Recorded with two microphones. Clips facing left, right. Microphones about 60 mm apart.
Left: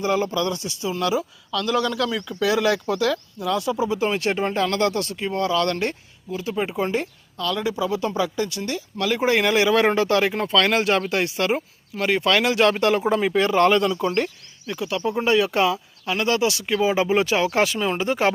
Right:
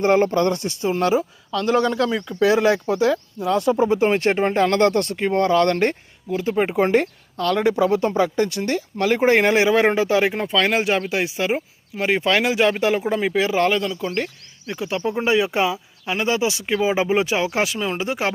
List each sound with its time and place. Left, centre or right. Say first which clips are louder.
0.0 s speech: right 5 dB; right; by 14.1 s centre
14.7 s speech: right 1 dB; right; by 18.3 s centre